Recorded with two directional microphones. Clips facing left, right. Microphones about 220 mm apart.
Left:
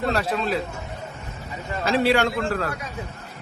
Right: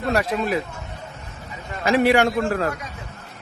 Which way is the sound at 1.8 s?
15° right (ahead or behind).